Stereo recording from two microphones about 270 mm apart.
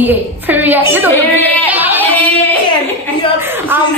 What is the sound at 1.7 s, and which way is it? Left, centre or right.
Singing, centre.